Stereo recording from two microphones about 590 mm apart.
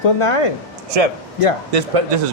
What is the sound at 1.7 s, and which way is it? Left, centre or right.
Speech, right.